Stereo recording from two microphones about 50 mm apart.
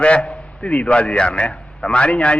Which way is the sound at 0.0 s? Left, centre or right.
Left.